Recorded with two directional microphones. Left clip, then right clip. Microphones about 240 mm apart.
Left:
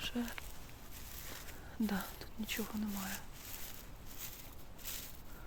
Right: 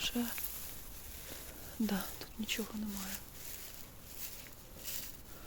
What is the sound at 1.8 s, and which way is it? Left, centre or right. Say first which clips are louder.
Speech: right 1 dB; centre.